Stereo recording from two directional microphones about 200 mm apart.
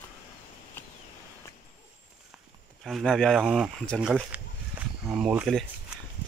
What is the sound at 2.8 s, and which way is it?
Speech, centre (ahead or behind).